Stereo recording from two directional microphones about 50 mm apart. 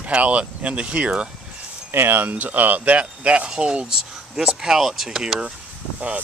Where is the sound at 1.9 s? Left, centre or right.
Right.